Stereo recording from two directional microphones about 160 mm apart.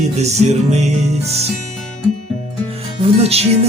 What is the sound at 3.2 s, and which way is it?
Speech, 40° right (ahead or behind).